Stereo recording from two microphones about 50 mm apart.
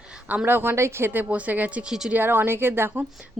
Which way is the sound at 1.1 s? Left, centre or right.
Right.